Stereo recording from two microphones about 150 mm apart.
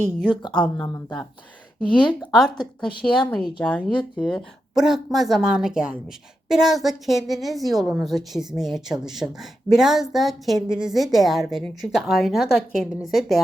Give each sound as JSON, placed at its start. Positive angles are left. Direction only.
{"t": 0.3, "sound": "speech", "side_deg": 30}
{"t": 2.3, "sound": "a woman's voice", "side_deg": 5}
{"t": 3.0, "sound": "speech", "side_deg": 35}
{"t": 3.6, "sound": "a woman's voice", "side_deg": 5}